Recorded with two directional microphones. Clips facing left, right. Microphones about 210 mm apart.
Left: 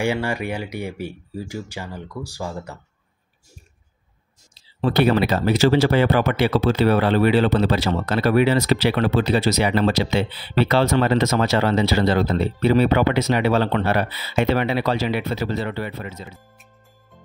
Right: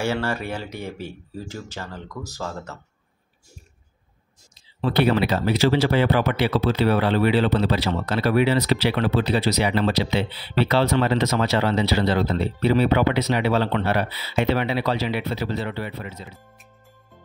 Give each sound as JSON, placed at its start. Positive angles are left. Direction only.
{"t": 0.0, "sound": "speech", "side_deg": 15}
{"t": 4.8, "sound": "speech", "side_deg": 45}